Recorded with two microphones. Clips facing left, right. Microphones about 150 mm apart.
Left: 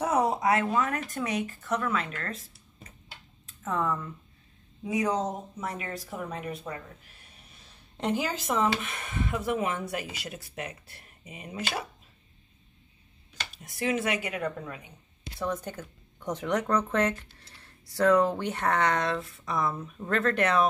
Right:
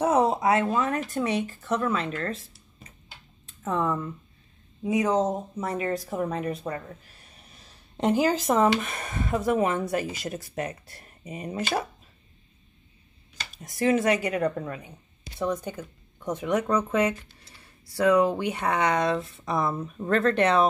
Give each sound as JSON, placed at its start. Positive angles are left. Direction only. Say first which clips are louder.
{"t": 0.0, "sound": "speech", "louder": "right 4 dB", "side_deg": -25}
{"t": 3.6, "sound": "speech", "louder": "right 3 dB", "side_deg": -30}
{"t": 8.0, "sound": "speech", "louder": "right 7 dB", "side_deg": -40}
{"t": 13.6, "sound": "speech", "louder": "right 6 dB", "side_deg": -40}
{"t": 15.3, "sound": "speech", "louder": "right 4 dB", "side_deg": -15}
{"t": 19.2, "sound": "speech", "louder": "right 3 dB", "side_deg": -30}